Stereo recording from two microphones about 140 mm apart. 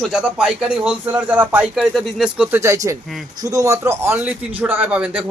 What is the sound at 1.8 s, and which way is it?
Speech, centre (ahead or behind).